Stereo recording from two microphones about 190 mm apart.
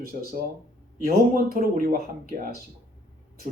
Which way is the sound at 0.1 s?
45° right (ahead or behind).